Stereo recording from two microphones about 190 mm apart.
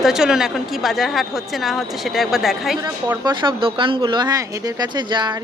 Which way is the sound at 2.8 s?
15° right (ahead or behind).